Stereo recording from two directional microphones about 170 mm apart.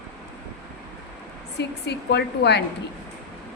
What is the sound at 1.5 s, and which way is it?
A woman's voice, 80° left.